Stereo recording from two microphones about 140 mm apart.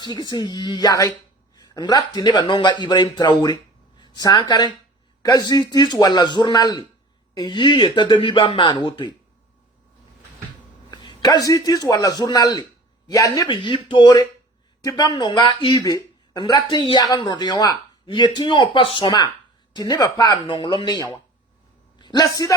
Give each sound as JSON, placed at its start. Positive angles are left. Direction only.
{"t": 0.0, "sound": "a man's voice", "side_deg": 30}
{"t": 10.9, "sound": "a man's voice", "side_deg": 30}